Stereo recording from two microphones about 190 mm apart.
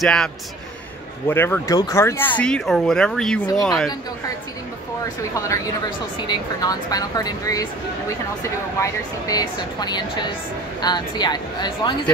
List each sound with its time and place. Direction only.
0.0 s a man's voice: 5° left (ahead or behind)
5.3 s speech: 15° left (ahead or behind)
8.7 s speech: 15° left (ahead or behind)